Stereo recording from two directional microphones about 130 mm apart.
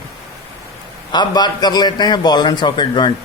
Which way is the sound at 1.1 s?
35° left (ahead or behind).